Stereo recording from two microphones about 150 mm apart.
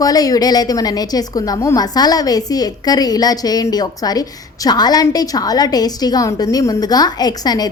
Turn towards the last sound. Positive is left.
turn(degrees=25)  # may be behind; listen again after turning